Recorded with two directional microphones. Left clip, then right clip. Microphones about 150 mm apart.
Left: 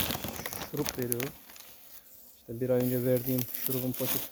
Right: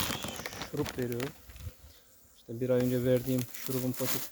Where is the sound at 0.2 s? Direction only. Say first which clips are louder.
Even; centre (ahead or behind).